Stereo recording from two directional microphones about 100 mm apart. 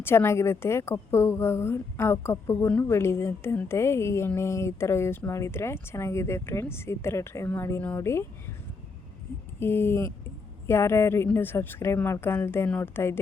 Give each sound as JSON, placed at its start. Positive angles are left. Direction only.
{"t": 0.0, "sound": "speech", "side_deg": 25}
{"t": 9.6, "sound": "speech", "side_deg": 25}